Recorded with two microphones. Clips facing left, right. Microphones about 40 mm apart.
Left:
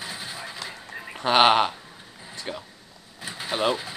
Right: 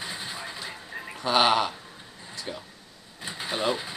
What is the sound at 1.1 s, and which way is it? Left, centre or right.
Speech, left.